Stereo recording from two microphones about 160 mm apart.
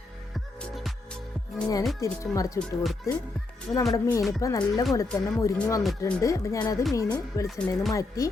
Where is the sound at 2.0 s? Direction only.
20° left (ahead or behind).